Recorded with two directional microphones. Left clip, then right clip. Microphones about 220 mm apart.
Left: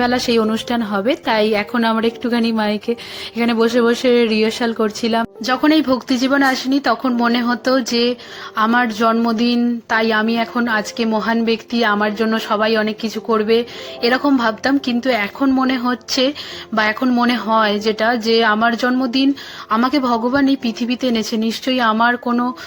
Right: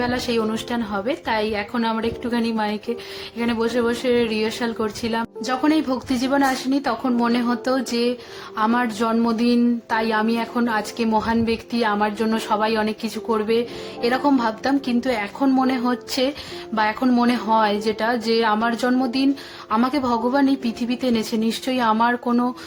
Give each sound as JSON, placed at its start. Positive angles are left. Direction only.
{"t": 0.0, "sound": "a woman's voice", "side_deg": 25}